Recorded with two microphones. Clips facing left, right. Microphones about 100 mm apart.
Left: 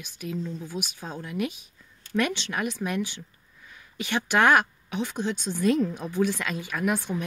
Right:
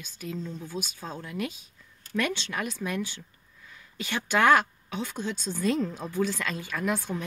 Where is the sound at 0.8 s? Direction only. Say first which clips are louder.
Even; 30° right (ahead or behind).